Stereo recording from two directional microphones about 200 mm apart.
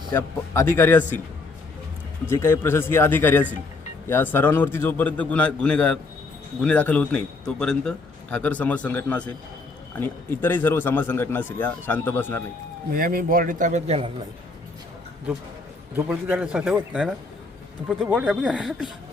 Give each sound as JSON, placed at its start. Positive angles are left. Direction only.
{"t": 0.1, "sound": "a man's voice", "side_deg": 10}
{"t": 2.3, "sound": "a man's voice", "side_deg": 10}
{"t": 12.9, "sound": "speech", "side_deg": -45}
{"t": 16.0, "sound": "a man's voice", "side_deg": -10}